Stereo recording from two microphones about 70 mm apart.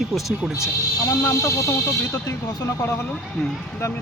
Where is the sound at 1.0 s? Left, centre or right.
Left.